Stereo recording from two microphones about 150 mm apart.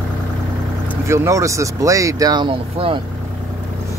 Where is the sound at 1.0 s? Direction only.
20° right (ahead or behind); by 3.0 s 35° right (ahead or behind).